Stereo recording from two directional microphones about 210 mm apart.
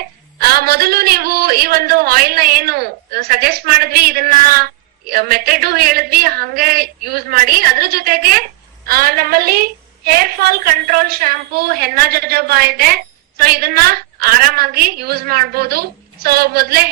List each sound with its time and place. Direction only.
0.3 s a man's voice: 45° right (ahead or behind)